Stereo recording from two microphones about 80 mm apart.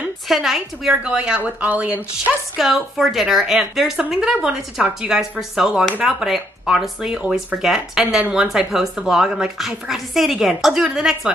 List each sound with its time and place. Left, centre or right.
0.3 s a woman's voice: centre; by 2.3 s right
2.5 s a woman's voice: centre